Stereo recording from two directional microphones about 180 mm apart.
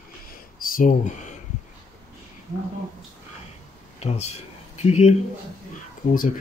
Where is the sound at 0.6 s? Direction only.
50° left (ahead or behind).